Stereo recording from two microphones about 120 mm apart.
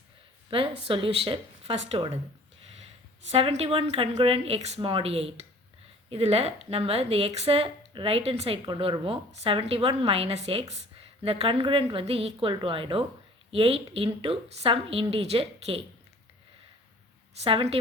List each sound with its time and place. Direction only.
0.5 s speech: 45° right (ahead or behind)
3.2 s speech: 55° right (ahead or behind)
17.4 s speech: 50° right (ahead or behind)